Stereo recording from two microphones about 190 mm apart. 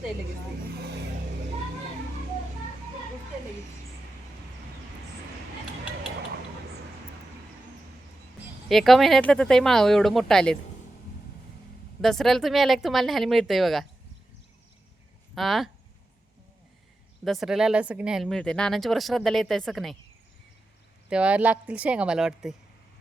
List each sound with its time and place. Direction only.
8.7 s speech: centre (ahead or behind)
12.0 s speech: centre (ahead or behind)
15.4 s speech: centre (ahead or behind)
17.2 s speech: centre (ahead or behind)
21.1 s speech: 5° right (ahead or behind)